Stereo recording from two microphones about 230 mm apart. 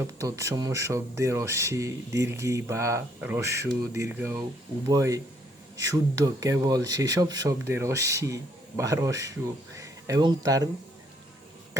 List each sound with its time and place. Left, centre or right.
0.0 s speech: centre